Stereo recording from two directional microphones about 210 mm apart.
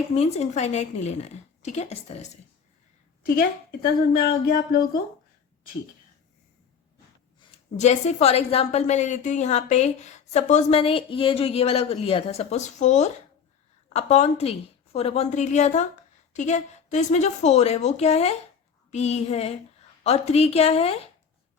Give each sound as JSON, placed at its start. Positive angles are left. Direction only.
{"t": 0.2, "sound": "a woman's voice", "side_deg": 30}
{"t": 3.8, "sound": "a sound", "side_deg": 45}
{"t": 7.3, "sound": "a woman's voice", "side_deg": 30}